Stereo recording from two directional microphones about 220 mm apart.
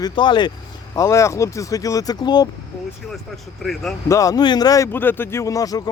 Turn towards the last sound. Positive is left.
turn(degrees=15)  # may be behind; listen again after turning